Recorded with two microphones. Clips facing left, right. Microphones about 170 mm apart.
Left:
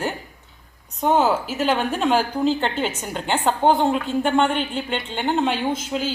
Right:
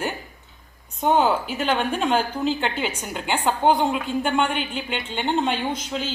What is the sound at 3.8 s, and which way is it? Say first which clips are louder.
Speech: left 3 dB; 35° left (ahead or behind).